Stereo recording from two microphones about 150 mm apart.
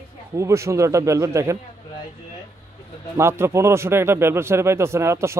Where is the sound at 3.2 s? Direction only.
15° right (ahead or behind).